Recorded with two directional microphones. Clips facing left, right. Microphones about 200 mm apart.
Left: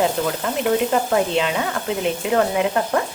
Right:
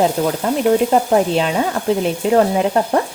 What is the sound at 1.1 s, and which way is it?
Speech, 40° right (ahead or behind).